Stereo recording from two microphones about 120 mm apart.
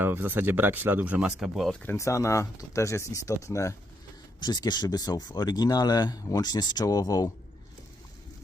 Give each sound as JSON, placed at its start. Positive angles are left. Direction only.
{"t": 0.0, "sound": "speech", "side_deg": -15}
{"t": 1.8, "sound": "speech", "side_deg": 20}
{"t": 4.4, "sound": "speech", "side_deg": 35}